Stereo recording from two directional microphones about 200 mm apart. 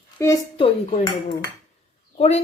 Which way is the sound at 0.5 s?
30° left (ahead or behind).